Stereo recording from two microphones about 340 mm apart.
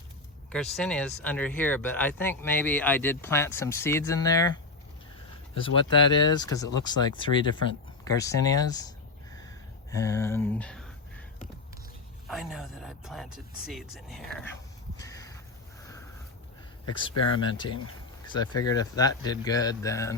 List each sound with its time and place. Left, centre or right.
0.5 s speech: centre
5.5 s speech: centre
9.9 s speech: centre
12.3 s speech: centre
14.9 s crow: centre
16.8 s speech: centre
18.3 s speech: centre